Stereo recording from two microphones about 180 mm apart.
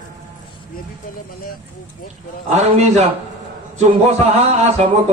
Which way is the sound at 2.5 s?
40° right (ahead or behind).